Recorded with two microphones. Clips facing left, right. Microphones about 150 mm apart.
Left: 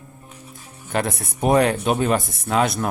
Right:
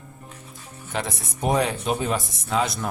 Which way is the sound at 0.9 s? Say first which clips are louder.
Left 6 dB; 60° left (ahead or behind).